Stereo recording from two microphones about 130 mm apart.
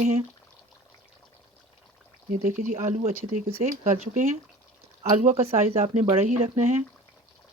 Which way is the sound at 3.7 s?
70° right (ahead or behind).